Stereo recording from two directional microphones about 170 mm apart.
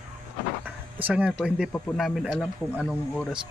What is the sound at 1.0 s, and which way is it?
Speech, 5° right (ahead or behind).